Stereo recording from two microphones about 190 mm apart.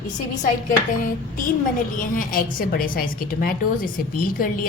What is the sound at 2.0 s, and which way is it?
A woman's voice, 45° left (ahead or behind).